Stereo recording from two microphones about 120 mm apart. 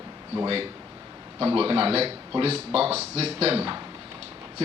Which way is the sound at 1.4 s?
50° right (ahead or behind).